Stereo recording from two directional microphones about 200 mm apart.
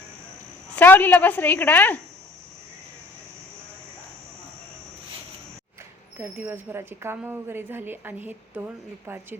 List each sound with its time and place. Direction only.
0.8 s a woman's voice: 10° left (ahead or behind)
6.1 s a woman's voice: 10° right (ahead or behind)